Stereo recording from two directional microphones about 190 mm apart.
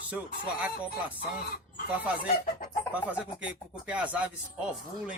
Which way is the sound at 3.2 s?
5° right (ahead or behind).